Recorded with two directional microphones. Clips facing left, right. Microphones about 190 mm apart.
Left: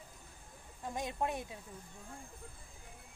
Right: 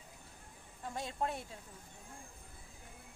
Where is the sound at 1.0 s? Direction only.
15° left (ahead or behind).